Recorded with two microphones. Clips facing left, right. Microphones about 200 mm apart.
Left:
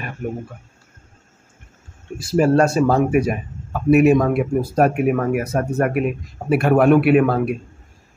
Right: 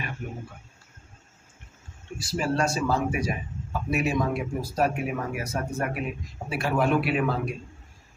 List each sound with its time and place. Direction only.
2.3 s a man's voice: 55° left (ahead or behind)